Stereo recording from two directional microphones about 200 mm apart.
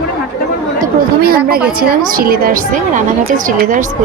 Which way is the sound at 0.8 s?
45° right (ahead or behind).